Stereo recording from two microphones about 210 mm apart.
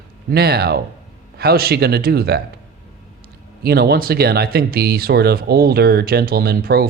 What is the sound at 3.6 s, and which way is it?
Speech, 50° right (ahead or behind).